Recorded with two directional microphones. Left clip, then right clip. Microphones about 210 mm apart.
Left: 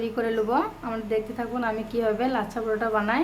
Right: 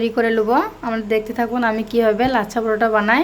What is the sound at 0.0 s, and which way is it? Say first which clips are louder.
A woman's voice: right 8 dB; 30° right (ahead or behind).